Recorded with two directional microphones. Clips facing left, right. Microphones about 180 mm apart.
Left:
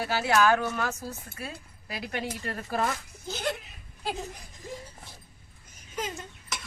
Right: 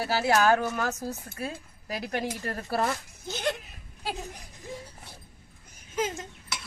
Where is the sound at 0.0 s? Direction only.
40° right (ahead or behind).